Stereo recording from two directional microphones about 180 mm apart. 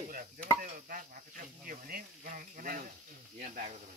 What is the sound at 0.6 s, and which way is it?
Speech, 50° right (ahead or behind).